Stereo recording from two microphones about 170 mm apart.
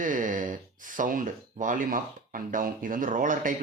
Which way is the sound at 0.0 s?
50° right (ahead or behind).